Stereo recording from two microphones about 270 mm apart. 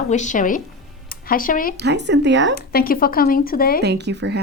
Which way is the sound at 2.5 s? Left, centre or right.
Left.